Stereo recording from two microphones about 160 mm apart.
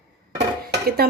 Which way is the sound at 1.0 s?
75° right (ahead or behind).